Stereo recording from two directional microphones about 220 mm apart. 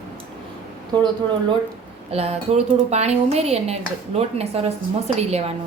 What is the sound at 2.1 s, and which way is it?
Speech, 25° right (ahead or behind).